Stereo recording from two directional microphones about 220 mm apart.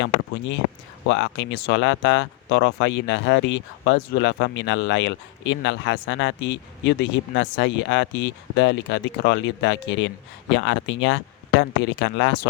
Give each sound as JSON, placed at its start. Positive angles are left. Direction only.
{"t": 0.0, "sound": "speech", "side_deg": 55}